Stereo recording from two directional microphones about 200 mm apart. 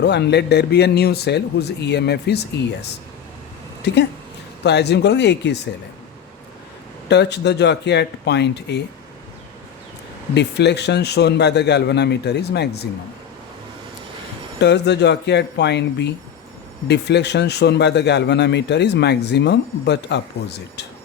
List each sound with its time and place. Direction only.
0.0 s a man's voice: 55° left (ahead or behind)
3.8 s a man's voice: 55° left (ahead or behind)
7.1 s a man's voice: 55° left (ahead or behind)
10.3 s a man's voice: 60° left (ahead or behind)
14.6 s a man's voice: 60° left (ahead or behind)